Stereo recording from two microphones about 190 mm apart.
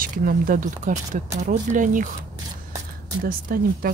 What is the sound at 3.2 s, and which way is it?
Speech, 50° right (ahead or behind).